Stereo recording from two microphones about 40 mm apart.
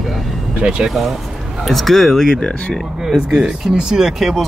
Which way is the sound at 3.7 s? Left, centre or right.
Centre.